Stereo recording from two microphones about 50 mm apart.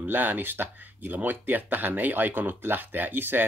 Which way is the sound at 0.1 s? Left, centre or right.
Right.